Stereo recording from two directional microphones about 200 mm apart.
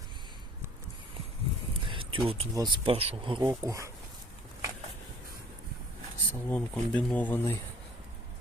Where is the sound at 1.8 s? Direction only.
25° right (ahead or behind).